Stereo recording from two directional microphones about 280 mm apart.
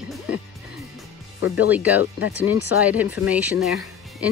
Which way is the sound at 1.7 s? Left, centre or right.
Centre.